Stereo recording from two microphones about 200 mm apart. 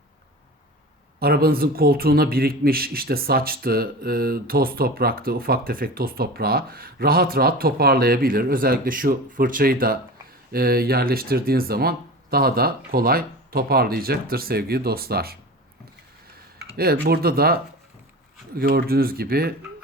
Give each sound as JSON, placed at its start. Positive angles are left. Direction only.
{"t": 1.2, "sound": "speech", "side_deg": -50}
{"t": 16.7, "sound": "speech", "side_deg": -50}